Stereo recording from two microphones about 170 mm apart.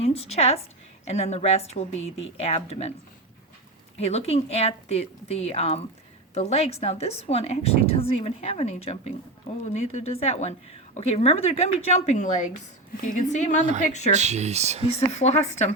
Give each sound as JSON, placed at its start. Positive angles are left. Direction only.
{"t": 0.0, "sound": "a woman's voice", "side_deg": 35}
{"t": 3.9, "sound": "a woman's voice", "side_deg": 35}
{"t": 14.1, "sound": "speech", "side_deg": -40}
{"t": 14.8, "sound": "a woman's voice", "side_deg": 35}